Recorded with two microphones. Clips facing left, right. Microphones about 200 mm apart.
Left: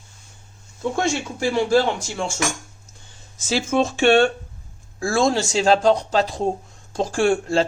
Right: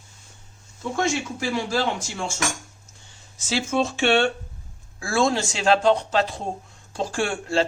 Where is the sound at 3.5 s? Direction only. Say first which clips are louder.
Left 3 dB; 45° left (ahead or behind).